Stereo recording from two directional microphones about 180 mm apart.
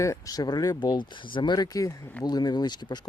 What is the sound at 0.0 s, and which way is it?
Speech, 20° left (ahead or behind).